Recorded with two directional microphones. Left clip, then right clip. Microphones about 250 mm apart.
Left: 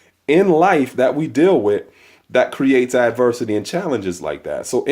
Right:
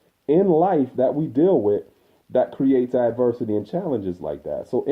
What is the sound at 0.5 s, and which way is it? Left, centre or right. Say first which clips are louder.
Speech: left 5 dB; left.